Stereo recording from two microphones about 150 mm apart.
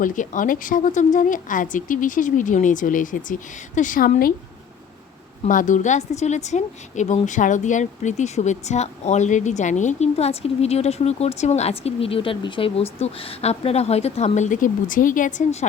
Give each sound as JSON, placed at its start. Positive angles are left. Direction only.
{"t": 0.0, "sound": "speech", "side_deg": 60}
{"t": 5.5, "sound": "a woman's voice", "side_deg": 60}